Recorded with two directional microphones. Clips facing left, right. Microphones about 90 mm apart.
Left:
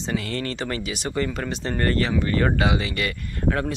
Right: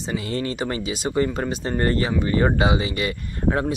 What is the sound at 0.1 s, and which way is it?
Speech, 20° right (ahead or behind).